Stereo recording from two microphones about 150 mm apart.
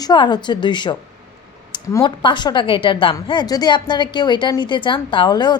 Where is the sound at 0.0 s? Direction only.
30° left (ahead or behind).